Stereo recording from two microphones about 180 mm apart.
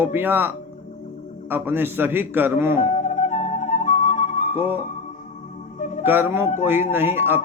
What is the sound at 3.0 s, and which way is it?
Music, 40° left (ahead or behind).